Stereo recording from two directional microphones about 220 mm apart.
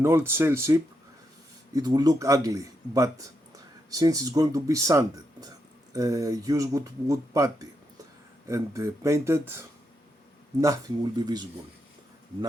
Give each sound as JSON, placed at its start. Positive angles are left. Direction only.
{"t": 0.0, "sound": "speech", "side_deg": -10}